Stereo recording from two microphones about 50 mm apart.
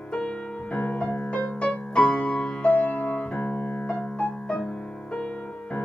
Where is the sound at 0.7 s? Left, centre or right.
Left.